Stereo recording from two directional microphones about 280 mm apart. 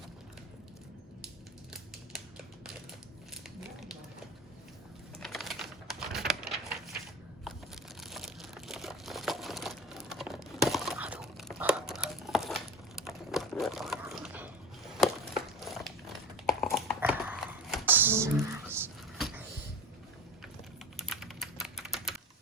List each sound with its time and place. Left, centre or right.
5.2 s typing: centre
8.0 s crushing: centre
14.9 s a sound: centre
18.8 s vehicle: centre
20.9 s typing: centre